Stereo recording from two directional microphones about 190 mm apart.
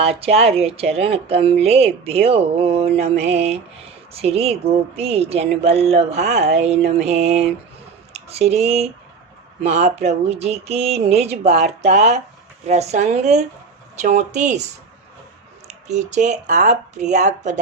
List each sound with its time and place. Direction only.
0.0 s speech: 30° right (ahead or behind)
4.1 s speech: 30° right (ahead or behind)
15.9 s speech: 40° right (ahead or behind)